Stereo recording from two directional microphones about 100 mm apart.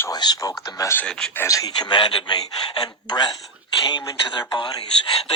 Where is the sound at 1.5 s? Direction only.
35° left (ahead or behind).